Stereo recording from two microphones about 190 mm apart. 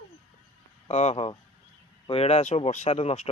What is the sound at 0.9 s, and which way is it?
Speech, 35° left (ahead or behind).